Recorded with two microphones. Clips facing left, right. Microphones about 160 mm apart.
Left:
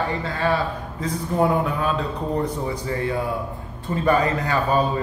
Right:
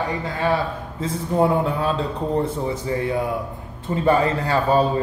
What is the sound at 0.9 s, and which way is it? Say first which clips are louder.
A man's voice: right 2 dB; 25° right (ahead or behind).